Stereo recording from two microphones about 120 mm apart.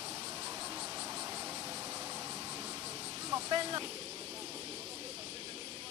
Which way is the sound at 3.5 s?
45° right (ahead or behind).